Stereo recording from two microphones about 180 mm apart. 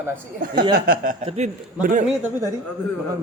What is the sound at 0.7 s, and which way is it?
Speech, 55° right (ahead or behind).